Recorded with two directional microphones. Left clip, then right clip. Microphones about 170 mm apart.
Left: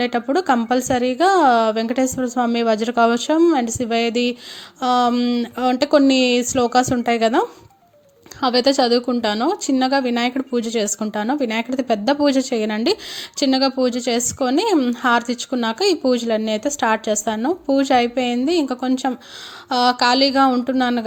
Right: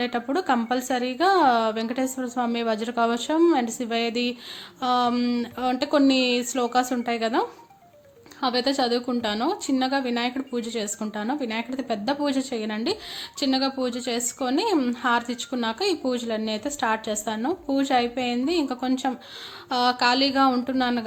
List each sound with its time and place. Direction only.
0.0 s a woman's voice: 30° left (ahead or behind)